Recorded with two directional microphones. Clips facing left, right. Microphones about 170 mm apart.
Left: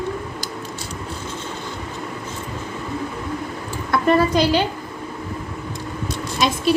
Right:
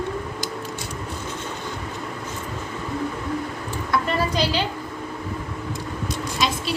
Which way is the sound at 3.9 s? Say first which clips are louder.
Left 7 dB; 55° left (ahead or behind).